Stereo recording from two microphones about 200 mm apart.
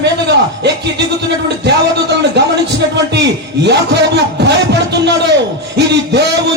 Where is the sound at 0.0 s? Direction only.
60° right (ahead or behind).